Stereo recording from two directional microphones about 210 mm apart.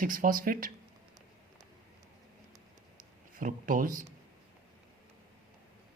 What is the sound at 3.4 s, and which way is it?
Speech, 40° right (ahead or behind).